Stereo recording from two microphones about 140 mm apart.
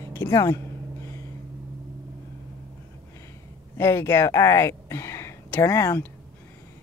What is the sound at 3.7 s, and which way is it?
Speech, 20° left (ahead or behind).